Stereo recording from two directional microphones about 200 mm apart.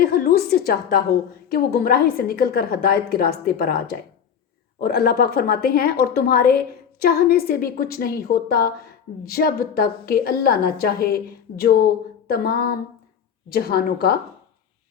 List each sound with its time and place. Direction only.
0.0 s a woman's voice: 50° left (ahead or behind)